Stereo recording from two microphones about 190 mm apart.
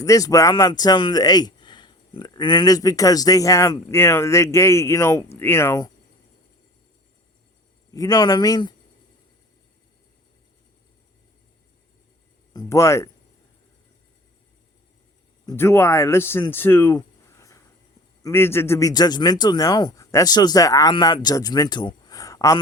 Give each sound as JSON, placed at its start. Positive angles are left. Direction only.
{"t": 0.0, "sound": "speech", "side_deg": 15}
{"t": 7.9, "sound": "speech", "side_deg": 20}
{"t": 12.5, "sound": "speech", "side_deg": 15}
{"t": 15.4, "sound": "speech", "side_deg": 10}
{"t": 16.5, "sound": "a sound", "side_deg": 10}
{"t": 18.2, "sound": "speech", "side_deg": 15}